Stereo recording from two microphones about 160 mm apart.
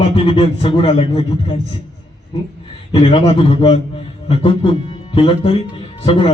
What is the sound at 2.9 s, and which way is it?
A man's voice, 35° left (ahead or behind).